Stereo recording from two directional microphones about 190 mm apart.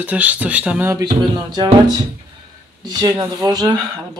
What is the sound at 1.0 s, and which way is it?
Music, 20° right (ahead or behind).